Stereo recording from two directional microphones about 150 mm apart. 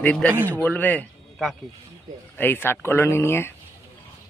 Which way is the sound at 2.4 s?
15° left (ahead or behind).